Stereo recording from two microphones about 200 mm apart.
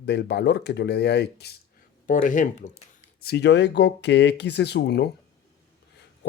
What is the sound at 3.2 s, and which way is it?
Speech, 55° left (ahead or behind).